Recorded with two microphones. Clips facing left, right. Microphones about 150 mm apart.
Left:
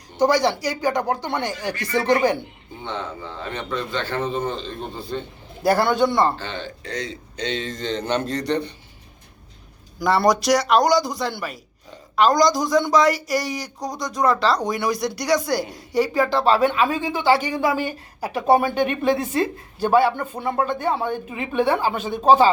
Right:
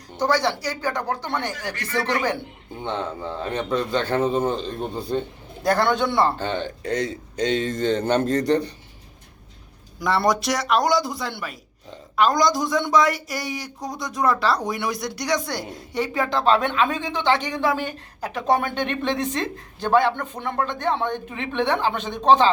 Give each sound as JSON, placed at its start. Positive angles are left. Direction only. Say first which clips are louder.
{"t": 0.2, "sound": "speech", "louder": "left 3 dB", "side_deg": 15}
{"t": 2.8, "sound": "a man's voice", "louder": "right 3 dB", "side_deg": -45}
{"t": 5.6, "sound": "speech", "louder": "left 2 dB", "side_deg": 10}
{"t": 6.4, "sound": "a man's voice", "louder": "right 5 dB", "side_deg": -50}
{"t": 10.0, "sound": "speech", "louder": "left 3 dB", "side_deg": 0}